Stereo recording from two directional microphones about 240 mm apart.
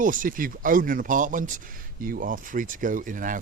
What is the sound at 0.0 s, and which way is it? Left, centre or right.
Speech, right.